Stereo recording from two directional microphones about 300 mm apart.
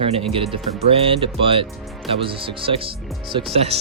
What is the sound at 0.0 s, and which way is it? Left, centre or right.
Speech, centre.